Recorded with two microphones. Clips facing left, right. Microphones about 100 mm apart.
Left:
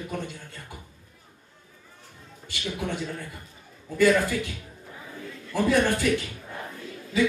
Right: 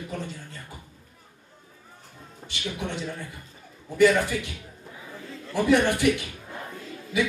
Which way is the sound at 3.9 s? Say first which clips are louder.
Right 1 dB; 20° right (ahead or behind).